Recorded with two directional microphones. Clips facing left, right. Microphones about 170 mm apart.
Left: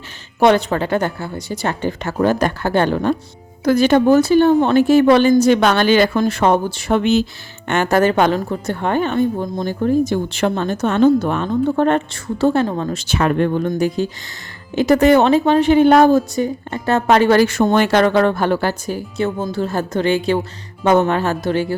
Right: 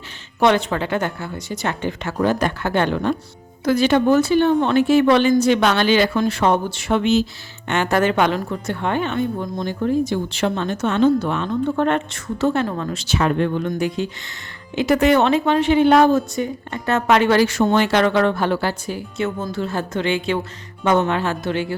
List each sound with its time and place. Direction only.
0.3 s a woman's voice: 40° left (ahead or behind)
7.0 s speech: 55° left (ahead or behind)
7.7 s a woman's voice: 45° left (ahead or behind)